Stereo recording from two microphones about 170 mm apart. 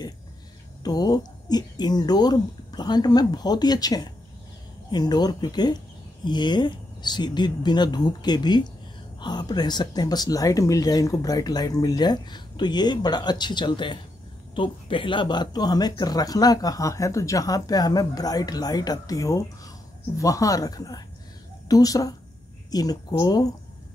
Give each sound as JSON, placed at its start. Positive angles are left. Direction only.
{"t": 0.8, "sound": "speech", "side_deg": 25}